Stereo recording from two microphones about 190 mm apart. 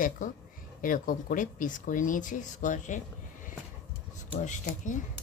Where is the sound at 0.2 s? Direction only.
45° left (ahead or behind).